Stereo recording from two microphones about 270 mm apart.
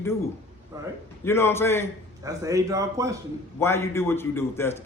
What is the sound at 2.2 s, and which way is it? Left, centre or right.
Speech, centre.